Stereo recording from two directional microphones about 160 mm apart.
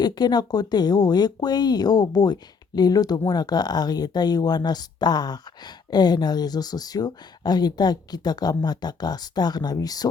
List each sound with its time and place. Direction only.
0.0 s speech: 25° left (ahead or behind)